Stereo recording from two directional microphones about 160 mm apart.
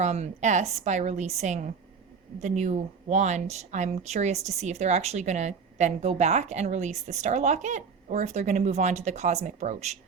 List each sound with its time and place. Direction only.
0.0 s speech: 45° right (ahead or behind)